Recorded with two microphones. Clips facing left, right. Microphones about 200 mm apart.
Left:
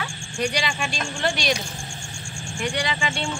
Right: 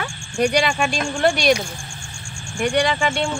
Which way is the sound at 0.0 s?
55° right (ahead or behind).